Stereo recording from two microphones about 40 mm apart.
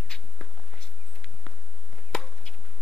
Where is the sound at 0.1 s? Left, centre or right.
Centre.